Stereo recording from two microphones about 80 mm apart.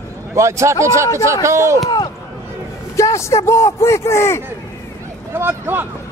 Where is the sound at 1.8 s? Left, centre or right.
Left.